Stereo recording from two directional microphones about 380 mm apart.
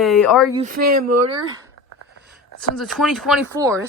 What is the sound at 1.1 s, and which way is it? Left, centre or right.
Speech, right.